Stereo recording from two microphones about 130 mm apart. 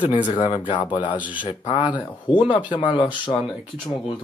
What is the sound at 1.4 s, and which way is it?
Speech, 40° left (ahead or behind).